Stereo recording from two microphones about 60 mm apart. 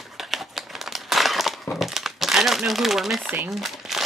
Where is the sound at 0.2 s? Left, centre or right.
Centre.